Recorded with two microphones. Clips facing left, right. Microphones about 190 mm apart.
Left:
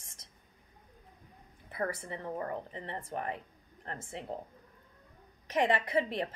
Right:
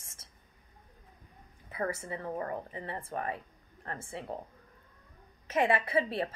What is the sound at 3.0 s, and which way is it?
Speech, 20° left (ahead or behind).